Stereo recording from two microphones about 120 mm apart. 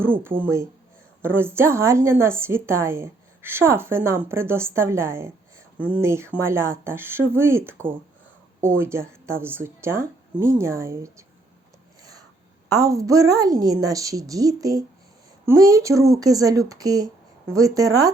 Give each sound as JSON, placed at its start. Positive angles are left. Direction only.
{"t": 0.0, "sound": "a woman's voice", "side_deg": -20}
{"t": 12.6, "sound": "a woman's voice", "side_deg": -30}